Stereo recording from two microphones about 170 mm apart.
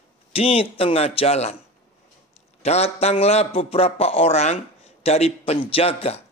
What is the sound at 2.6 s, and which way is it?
A man's voice, 40° left (ahead or behind).